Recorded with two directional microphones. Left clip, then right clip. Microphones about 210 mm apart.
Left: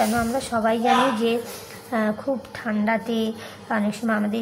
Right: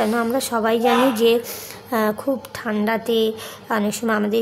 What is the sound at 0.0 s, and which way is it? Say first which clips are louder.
A woman's voice: right 2 dB; 45° right (ahead or behind).